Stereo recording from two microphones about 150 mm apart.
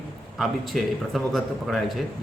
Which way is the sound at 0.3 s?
Centre (ahead or behind).